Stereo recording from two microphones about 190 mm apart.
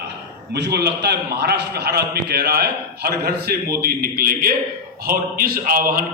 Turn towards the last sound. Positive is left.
turn(degrees=-50)  # may be behind; listen again after turning